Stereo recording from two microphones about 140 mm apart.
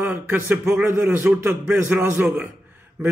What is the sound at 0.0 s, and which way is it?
A man's voice, 15° right (ahead or behind).